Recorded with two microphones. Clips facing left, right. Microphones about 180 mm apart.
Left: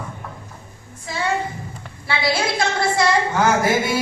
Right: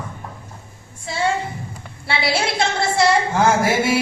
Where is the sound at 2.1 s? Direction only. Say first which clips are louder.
Even; 25° right (ahead or behind).